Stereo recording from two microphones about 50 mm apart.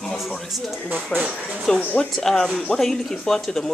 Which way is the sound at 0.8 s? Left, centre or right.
Right.